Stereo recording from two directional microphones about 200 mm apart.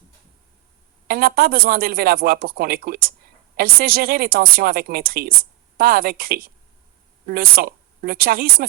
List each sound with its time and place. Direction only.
1.0 s speech: 45° right (ahead or behind)